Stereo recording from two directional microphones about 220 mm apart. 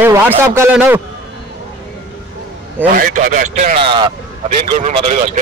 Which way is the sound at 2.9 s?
40° right (ahead or behind).